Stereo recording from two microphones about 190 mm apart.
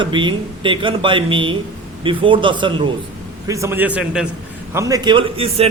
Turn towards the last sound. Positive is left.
turn(degrees=-30)  # may be behind; listen again after turning